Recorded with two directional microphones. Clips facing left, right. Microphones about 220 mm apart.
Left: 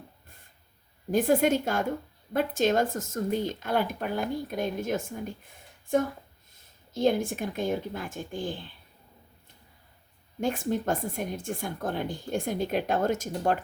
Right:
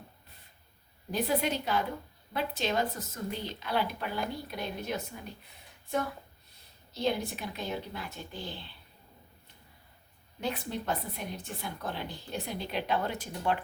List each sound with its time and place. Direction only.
1.1 s speech: 50° left (ahead or behind)
10.4 s speech: 45° left (ahead or behind)